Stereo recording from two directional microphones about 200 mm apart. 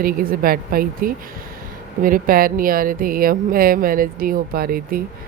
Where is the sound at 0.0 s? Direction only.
45° right (ahead or behind).